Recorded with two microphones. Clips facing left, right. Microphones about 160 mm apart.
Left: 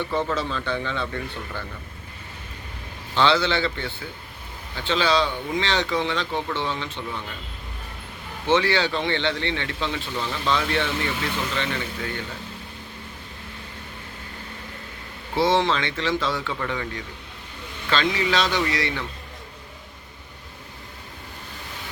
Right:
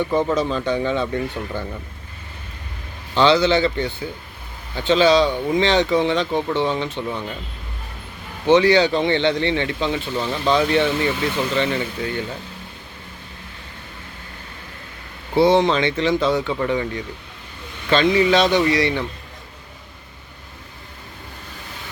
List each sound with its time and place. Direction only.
0.1 s speech: 15° right (ahead or behind)
3.2 s speech: 15° right (ahead or behind)
8.4 s speech: 15° right (ahead or behind)
15.4 s speech: 20° right (ahead or behind)